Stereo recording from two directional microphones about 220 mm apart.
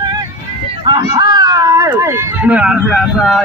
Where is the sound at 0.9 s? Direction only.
20° right (ahead or behind).